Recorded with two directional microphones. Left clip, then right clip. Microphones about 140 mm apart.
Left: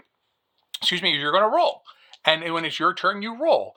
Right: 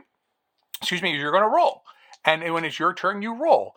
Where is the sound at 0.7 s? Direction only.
40° right (ahead or behind).